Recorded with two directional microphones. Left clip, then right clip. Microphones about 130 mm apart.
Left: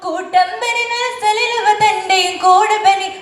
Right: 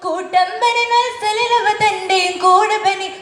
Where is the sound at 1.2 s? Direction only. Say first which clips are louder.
Left 1 dB; 20° right (ahead or behind).